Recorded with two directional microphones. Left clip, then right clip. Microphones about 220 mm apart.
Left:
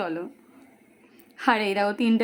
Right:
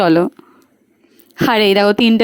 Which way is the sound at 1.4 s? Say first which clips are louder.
Right 11 dB; 40° right (ahead or behind).